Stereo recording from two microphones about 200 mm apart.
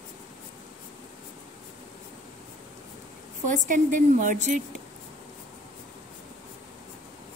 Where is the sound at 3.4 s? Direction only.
40° right (ahead or behind).